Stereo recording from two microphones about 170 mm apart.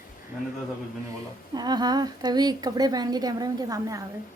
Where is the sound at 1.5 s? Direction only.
25° right (ahead or behind).